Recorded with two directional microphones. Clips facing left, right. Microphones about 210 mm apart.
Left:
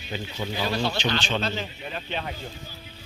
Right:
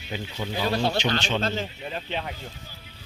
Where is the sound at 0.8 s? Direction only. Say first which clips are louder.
Right 2 dB; 45° right (ahead or behind).